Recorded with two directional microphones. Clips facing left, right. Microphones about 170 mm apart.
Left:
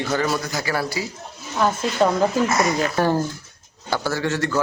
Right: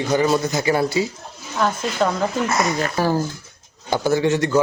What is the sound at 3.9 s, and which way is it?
Speech, 20° right (ahead or behind).